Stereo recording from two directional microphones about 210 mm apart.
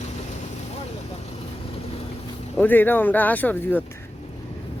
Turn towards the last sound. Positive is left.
turn(degrees=10)  # may be behind; listen again after turning